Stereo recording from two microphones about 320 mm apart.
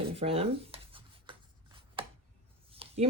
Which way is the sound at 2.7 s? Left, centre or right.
Centre.